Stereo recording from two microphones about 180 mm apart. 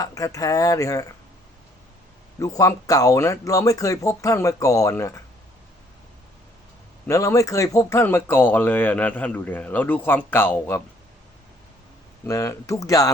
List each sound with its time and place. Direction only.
0.0 s speech: 20° left (ahead or behind)
2.4 s speech: 20° left (ahead or behind)
7.1 s speech: 15° left (ahead or behind)
12.2 s speech: 15° left (ahead or behind)